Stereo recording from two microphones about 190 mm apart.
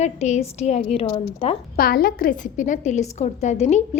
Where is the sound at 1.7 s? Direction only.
50° left (ahead or behind).